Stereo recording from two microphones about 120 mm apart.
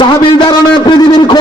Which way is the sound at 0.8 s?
40° left (ahead or behind).